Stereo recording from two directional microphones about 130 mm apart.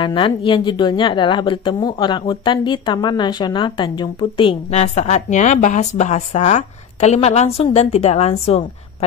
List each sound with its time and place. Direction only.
0.0 s speech: 40° left (ahead or behind)
4.6 s a woman's voice: 60° left (ahead or behind)